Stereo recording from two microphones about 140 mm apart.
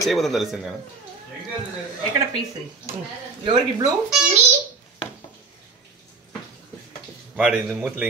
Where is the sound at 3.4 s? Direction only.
30° right (ahead or behind).